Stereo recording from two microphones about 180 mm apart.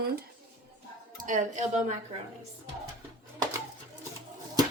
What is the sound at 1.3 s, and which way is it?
Speech, 40° right (ahead or behind).